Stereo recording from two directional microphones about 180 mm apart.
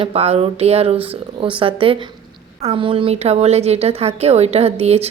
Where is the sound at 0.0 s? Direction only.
35° right (ahead or behind).